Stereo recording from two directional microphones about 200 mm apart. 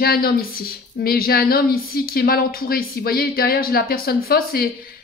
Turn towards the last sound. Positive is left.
turn(degrees=50)  # may be behind; listen again after turning